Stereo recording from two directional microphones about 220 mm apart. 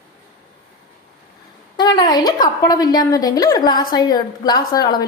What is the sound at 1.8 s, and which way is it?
A woman's voice, 20° left (ahead or behind).